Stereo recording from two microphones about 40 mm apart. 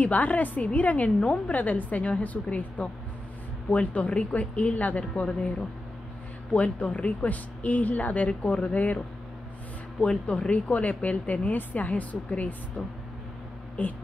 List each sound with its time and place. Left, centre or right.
0.0 s a woman's voice: left
7.2 s a woman's voice: left
9.9 s speech: left
10.5 s a woman's voice: left